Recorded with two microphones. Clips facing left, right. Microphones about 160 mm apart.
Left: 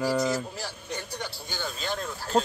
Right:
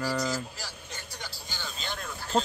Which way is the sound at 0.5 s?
60° left (ahead or behind).